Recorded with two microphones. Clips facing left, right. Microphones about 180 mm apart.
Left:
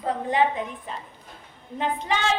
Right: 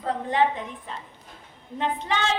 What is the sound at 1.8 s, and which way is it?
Speech, 10° left (ahead or behind).